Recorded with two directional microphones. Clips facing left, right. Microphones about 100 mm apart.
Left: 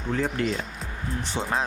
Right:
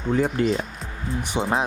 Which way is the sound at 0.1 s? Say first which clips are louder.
Right 5 dB; 15° right (ahead or behind).